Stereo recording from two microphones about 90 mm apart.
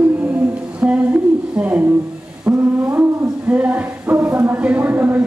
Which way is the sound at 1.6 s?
15° right (ahead or behind).